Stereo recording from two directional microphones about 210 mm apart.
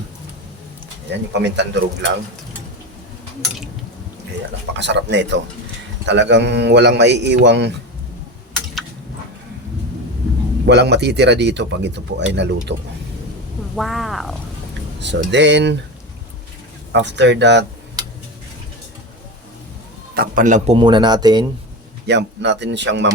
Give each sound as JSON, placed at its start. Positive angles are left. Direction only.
{"t": 1.3, "sound": "speech", "side_deg": -55}
{"t": 4.8, "sound": "speech", "side_deg": -55}
{"t": 10.7, "sound": "speech", "side_deg": -55}
{"t": 13.7, "sound": "speech", "side_deg": 0}
{"t": 15.3, "sound": "speech", "side_deg": -55}
{"t": 16.9, "sound": "speech", "side_deg": -55}
{"t": 18.0, "sound": "a sound", "side_deg": -20}
{"t": 20.1, "sound": "a man's voice", "side_deg": -40}
{"t": 20.7, "sound": "speech", "side_deg": -20}
{"t": 22.0, "sound": "speech", "side_deg": -55}